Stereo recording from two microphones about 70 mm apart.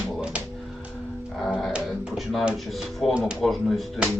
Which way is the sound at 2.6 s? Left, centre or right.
Centre.